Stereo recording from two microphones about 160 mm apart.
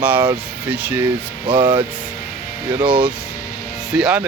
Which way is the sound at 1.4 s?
30° right (ahead or behind).